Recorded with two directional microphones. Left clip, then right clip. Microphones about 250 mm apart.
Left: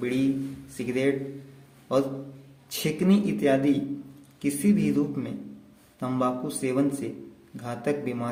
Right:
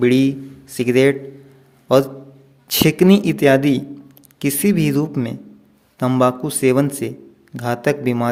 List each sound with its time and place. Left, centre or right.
0.0 s speech: right
2.6 s speech: right